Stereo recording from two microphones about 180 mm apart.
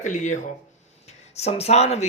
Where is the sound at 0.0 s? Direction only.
45° left (ahead or behind).